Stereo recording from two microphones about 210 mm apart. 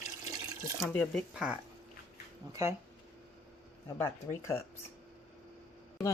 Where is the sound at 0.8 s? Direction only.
Centre (ahead or behind).